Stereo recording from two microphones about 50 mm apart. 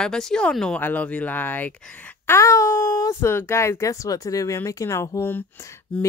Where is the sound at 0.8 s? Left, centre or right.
Left.